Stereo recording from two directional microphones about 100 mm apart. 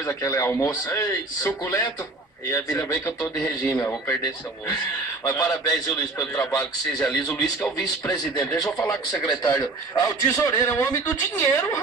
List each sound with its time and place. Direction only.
0.0 s a man's voice: 30° left (ahead or behind)
5.2 s a man's voice: 35° left (ahead or behind)
6.1 s a man's voice: 25° left (ahead or behind)